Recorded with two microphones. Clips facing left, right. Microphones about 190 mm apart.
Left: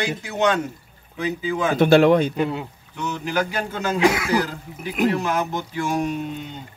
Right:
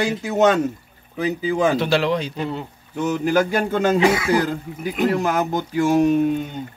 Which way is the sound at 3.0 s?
45° right (ahead or behind).